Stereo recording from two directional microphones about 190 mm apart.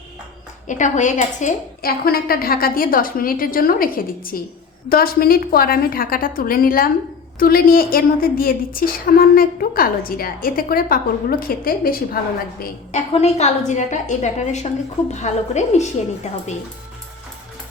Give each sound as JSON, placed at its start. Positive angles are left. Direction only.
{"t": 0.7, "sound": "a woman's voice", "side_deg": 40}
{"t": 13.1, "sound": "a woman's voice", "side_deg": 35}